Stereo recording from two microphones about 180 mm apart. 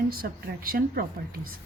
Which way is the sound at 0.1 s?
55° right (ahead or behind).